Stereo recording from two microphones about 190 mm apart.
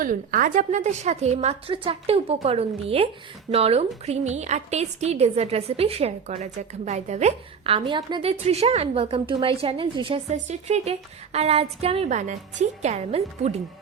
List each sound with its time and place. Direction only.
0.0 s a woman's voice: 45° right (ahead or behind)